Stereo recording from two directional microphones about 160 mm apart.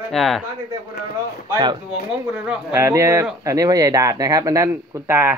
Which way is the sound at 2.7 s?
15° right (ahead or behind).